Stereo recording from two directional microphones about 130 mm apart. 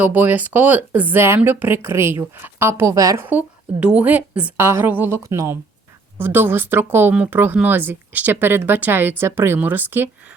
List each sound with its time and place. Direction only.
0.0 s speech: 15° right (ahead or behind)
3.2 s speech: 10° right (ahead or behind)